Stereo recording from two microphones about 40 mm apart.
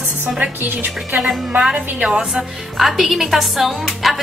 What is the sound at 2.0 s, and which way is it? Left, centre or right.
Speech, centre.